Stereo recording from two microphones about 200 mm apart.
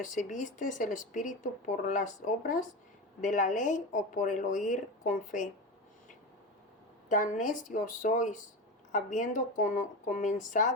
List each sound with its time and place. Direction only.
0.0 s speech: 40° left (ahead or behind)
7.1 s speech: 40° left (ahead or behind)